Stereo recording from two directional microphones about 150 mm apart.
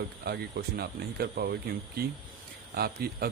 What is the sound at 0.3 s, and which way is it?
Speech, 90° right.